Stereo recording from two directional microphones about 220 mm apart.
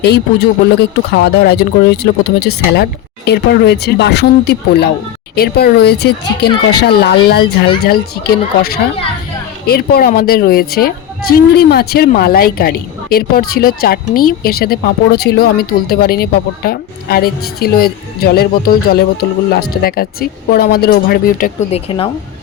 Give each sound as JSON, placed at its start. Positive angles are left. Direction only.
{"t": 0.0, "sound": "speech", "side_deg": 50}
{"t": 21.8, "sound": "a woman's voice", "side_deg": 20}